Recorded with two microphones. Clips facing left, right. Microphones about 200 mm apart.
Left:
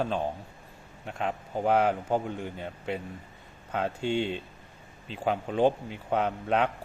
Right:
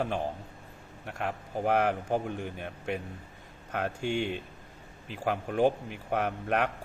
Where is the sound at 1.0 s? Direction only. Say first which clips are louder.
Left 2 dB; 20° left (ahead or behind).